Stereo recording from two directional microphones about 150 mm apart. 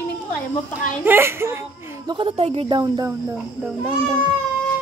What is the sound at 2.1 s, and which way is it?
Speech, 35° right (ahead or behind).